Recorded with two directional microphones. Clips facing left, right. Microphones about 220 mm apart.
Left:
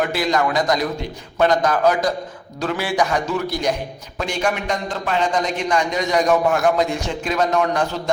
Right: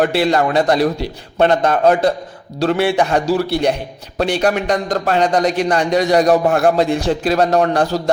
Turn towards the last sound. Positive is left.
turn(degrees=-35)  # may be behind; listen again after turning